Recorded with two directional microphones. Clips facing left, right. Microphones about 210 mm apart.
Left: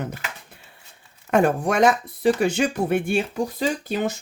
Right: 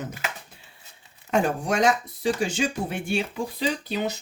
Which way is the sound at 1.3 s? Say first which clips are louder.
Left 4 dB; 55° left (ahead or behind).